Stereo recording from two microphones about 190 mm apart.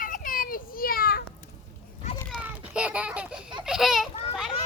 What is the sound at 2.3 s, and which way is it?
Children playing, 5° right (ahead or behind).